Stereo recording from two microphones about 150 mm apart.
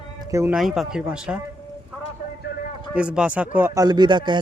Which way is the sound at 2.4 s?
90° left.